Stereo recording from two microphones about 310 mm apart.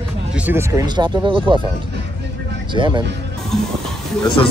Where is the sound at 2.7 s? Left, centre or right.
Centre.